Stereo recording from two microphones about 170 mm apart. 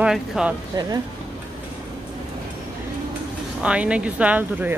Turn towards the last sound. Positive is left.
turn(degrees=-10)  # may be behind; listen again after turning